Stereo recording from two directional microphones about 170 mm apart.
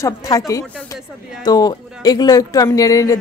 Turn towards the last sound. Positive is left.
turn(degrees=20)  # may be behind; listen again after turning